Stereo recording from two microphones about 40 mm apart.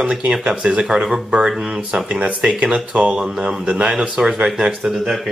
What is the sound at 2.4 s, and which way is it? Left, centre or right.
Speech, right.